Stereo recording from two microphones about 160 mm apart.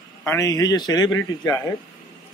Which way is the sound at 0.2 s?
20° left (ahead or behind).